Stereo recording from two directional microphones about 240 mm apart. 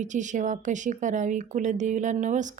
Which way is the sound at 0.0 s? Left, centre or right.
Right.